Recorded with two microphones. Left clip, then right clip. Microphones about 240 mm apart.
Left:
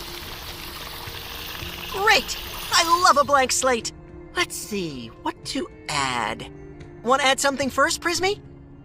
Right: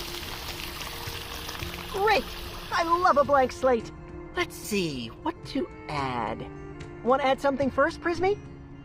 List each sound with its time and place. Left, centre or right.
0.0 s music: centre
2.2 s a sound: centre
2.7 s speech: left
4.4 s speech: left
4.7 s speech: centre
5.2 s speech: left